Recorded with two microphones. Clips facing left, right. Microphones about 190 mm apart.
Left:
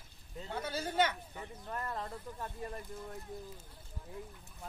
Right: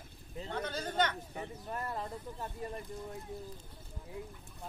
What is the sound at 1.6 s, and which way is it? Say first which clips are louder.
Speech: even; 15° right (ahead or behind).